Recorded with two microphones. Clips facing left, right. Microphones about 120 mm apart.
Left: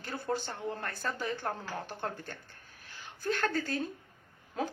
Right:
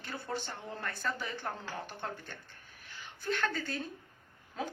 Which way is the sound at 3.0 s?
40° left (ahead or behind).